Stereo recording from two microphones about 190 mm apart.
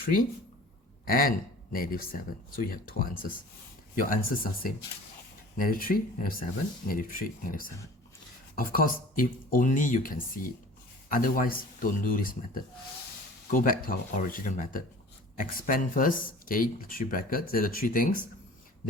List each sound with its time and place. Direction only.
0.0 s speech: 50° left (ahead or behind)
13.5 s speech: 45° left (ahead or behind)